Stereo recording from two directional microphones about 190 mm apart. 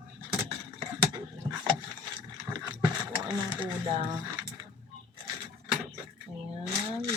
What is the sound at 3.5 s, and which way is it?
Speech, 25° right (ahead or behind).